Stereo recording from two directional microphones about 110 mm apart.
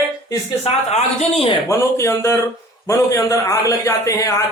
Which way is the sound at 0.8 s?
70° left (ahead or behind).